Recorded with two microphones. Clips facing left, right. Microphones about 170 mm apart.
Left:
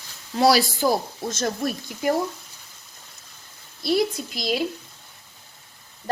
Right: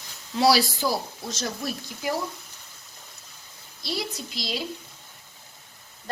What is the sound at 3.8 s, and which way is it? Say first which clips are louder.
Speech: left 10 dB; 55° left (ahead or behind).